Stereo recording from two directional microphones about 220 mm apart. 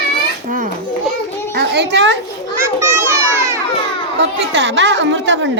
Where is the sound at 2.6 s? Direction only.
10° right (ahead or behind).